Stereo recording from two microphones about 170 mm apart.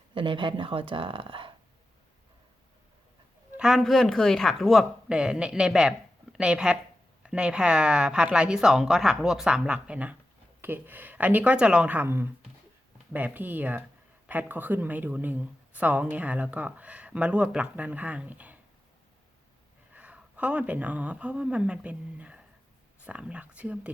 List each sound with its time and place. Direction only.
0.1 s speech: 30° right (ahead or behind)
3.6 s speech: centre (ahead or behind)
19.9 s a woman's voice: 10° right (ahead or behind)